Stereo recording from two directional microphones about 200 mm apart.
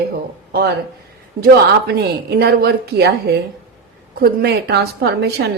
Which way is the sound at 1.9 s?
50° right (ahead or behind).